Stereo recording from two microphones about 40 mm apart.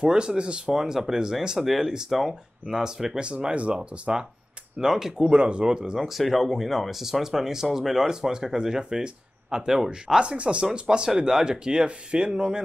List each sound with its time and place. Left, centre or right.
0.0 s speech: right
0.7 s speech: centre
1.6 s speech: centre
3.3 s speech: right
5.3 s speech: right
5.9 s speech: centre